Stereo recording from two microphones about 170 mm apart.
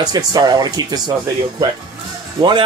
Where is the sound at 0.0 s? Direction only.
25° right (ahead or behind).